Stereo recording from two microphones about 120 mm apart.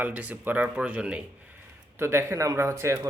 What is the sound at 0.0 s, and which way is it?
Speech, 10° right (ahead or behind).